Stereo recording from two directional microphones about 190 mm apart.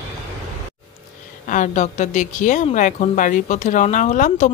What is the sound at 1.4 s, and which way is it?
Speech, 40° left (ahead or behind).